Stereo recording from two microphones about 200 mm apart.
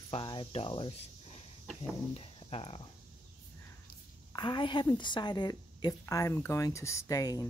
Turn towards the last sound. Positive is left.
turn(degrees=15)  # may be behind; listen again after turning